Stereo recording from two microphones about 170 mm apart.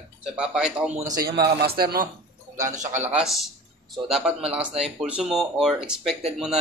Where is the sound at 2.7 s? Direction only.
45° right (ahead or behind).